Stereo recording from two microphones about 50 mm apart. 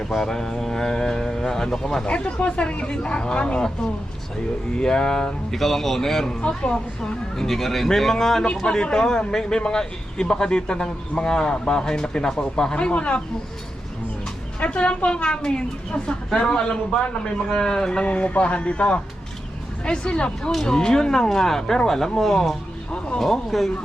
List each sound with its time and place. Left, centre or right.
0.0 s a man's voice: centre
2.0 s speech: left
4.7 s a man's voice: centre
5.5 s a man's voice: centre
6.4 s a man's voice: centre
14.6 s a man's voice: left
18.1 s a man's voice: left; by 22.5 s centre
22.9 s speech: centre
23.2 s a man's voice: centre